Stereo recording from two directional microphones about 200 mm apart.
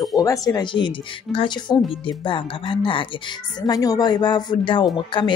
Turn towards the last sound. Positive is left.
turn(degrees=25)  # may be behind; listen again after turning